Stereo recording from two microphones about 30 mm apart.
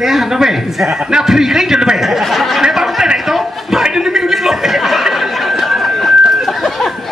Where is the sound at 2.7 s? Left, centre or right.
Centre.